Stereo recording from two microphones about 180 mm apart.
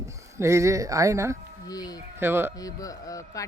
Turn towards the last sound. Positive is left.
turn(degrees=20)  # may be behind; listen again after turning